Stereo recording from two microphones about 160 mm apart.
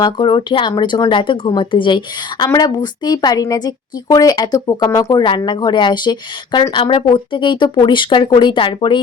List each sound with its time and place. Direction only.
0.0 s speech: 30° left (ahead or behind)